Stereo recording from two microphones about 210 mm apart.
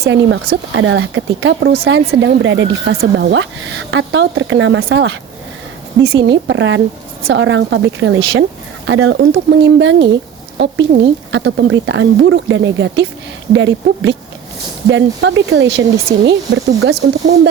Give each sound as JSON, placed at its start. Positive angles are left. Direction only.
{"t": 0.0, "sound": "speech", "side_deg": -60}
{"t": 6.0, "sound": "a woman's voice", "side_deg": -15}
{"t": 6.2, "sound": "a woman's voice", "side_deg": -60}
{"t": 11.3, "sound": "speech", "side_deg": -60}